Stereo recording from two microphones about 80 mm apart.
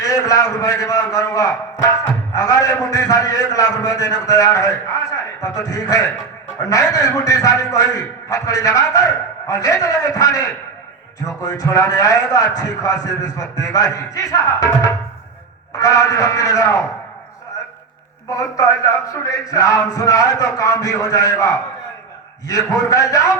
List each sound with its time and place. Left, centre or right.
0.0 s a man's voice: left
18.3 s a man's voice: left